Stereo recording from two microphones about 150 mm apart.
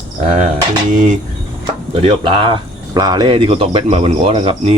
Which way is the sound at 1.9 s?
35° right (ahead or behind).